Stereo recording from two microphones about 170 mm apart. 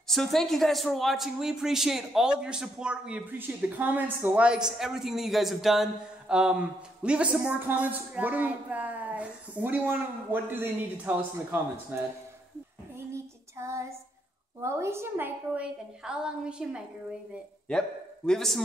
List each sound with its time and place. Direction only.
0.1 s speech: centre (ahead or behind)
12.9 s child singing: 15° right (ahead or behind)
14.6 s a woman's voice: 15° right (ahead or behind); by 18.6 s 5° left (ahead or behind)